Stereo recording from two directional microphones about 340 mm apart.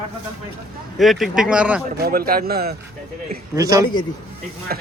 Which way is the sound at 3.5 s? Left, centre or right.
Centre.